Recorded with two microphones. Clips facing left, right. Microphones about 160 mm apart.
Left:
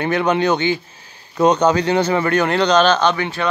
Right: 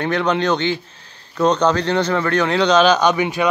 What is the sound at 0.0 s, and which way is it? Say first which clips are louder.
Speech: left 1 dB; 5° left (ahead or behind).